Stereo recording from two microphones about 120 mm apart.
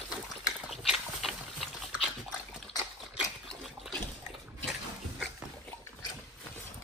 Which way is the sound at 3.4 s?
Centre (ahead or behind).